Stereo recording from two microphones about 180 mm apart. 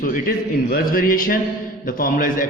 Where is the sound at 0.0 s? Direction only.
50° left (ahead or behind).